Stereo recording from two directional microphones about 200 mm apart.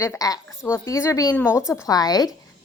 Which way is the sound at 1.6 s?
5° right (ahead or behind).